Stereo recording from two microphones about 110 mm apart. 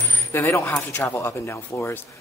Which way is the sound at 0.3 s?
25° left (ahead or behind).